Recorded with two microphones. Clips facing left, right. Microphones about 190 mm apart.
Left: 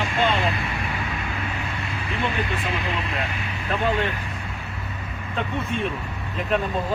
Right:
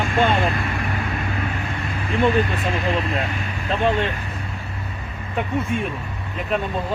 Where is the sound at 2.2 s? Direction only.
45° right (ahead or behind).